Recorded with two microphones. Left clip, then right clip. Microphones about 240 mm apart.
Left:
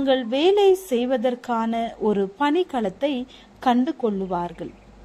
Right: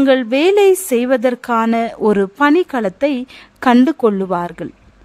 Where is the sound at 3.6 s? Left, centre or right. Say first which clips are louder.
Right 9 dB; right.